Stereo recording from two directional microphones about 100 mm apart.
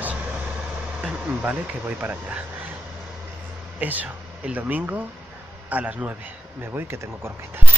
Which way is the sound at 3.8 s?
15° right (ahead or behind).